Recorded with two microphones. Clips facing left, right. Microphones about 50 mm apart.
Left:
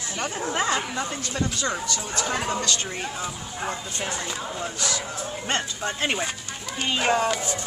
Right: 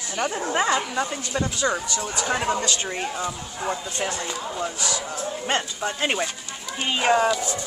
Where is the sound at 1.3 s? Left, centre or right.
Centre.